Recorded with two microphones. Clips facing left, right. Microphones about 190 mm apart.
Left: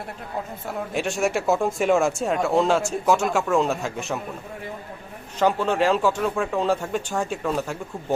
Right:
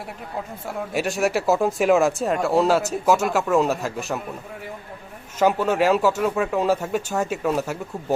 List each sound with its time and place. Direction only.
0.9 s speech: centre (ahead or behind)
5.4 s speech: 5° right (ahead or behind)